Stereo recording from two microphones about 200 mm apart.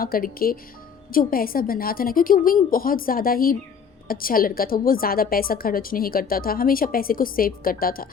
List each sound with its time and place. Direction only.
0.0 s a woman's voice: 45° left (ahead or behind)